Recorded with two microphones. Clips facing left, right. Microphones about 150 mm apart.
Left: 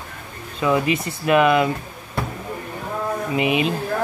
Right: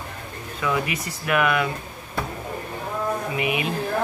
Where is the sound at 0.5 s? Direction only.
25° left (ahead or behind).